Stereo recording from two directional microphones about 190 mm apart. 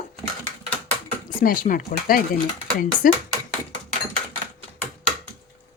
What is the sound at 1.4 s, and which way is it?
Speech, 45° left (ahead or behind).